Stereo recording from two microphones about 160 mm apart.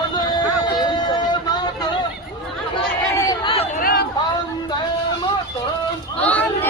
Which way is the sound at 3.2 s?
25° left (ahead or behind).